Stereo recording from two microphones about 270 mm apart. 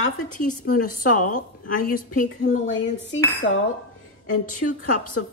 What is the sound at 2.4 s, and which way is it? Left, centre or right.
Cutlery, left.